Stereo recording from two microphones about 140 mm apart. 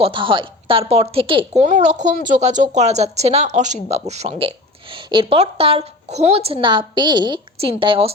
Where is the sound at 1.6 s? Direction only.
55° right (ahead or behind).